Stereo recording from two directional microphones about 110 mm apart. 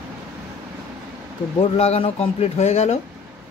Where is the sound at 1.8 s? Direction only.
70° left (ahead or behind); by 3.0 s 85° left.